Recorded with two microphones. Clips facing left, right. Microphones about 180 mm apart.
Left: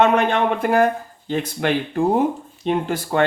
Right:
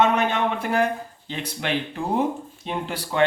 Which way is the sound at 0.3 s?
50° left (ahead or behind).